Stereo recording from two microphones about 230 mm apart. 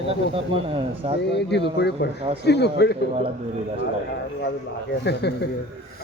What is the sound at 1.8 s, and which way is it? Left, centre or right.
A man's voice, left.